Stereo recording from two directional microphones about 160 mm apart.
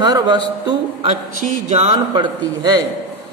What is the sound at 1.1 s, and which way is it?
Speech, 55° right (ahead or behind).